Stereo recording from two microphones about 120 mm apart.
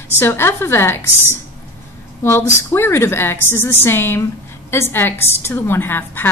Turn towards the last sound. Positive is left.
turn(degrees=15)  # may be behind; listen again after turning